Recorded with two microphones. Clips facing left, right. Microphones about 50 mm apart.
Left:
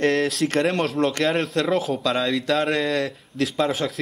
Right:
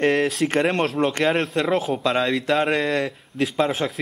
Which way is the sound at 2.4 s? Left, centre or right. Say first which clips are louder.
Right 1 dB; centre.